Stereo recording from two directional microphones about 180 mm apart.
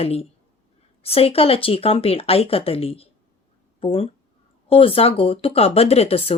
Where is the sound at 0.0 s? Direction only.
35° left (ahead or behind).